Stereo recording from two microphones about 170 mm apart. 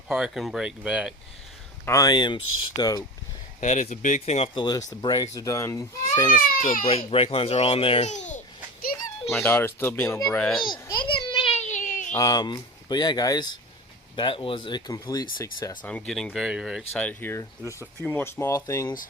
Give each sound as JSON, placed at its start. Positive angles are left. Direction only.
{"t": 0.1, "sound": "speech", "side_deg": 0}
{"t": 1.8, "sound": "speech", "side_deg": 20}
{"t": 3.6, "sound": "speech", "side_deg": 45}
{"t": 6.3, "sound": "speech", "side_deg": 55}
{"t": 6.8, "sound": "speech", "side_deg": 35}
{"t": 9.3, "sound": "speech", "side_deg": 10}
{"t": 10.3, "sound": "speech", "side_deg": 5}
{"t": 10.6, "sound": "a sound", "side_deg": 30}
{"t": 12.1, "sound": "speech", "side_deg": 20}
{"t": 15.8, "sound": "speech", "side_deg": 5}